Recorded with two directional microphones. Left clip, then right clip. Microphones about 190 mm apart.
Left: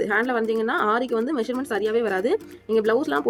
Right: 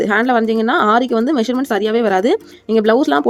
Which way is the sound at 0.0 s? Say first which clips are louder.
Right 8 dB; 55° right (ahead or behind).